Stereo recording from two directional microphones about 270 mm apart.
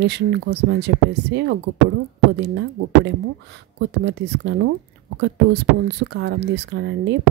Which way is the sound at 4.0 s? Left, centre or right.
Right.